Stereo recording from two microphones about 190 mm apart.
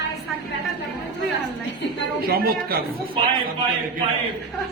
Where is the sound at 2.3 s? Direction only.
55° right (ahead or behind).